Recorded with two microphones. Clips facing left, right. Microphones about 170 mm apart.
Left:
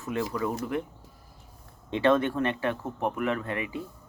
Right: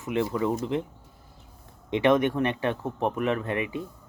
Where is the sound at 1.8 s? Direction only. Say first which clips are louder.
Right 2 dB; 20° right (ahead or behind).